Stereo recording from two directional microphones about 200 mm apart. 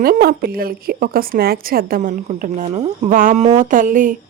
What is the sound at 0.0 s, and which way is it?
A woman's voice, 45° right (ahead or behind).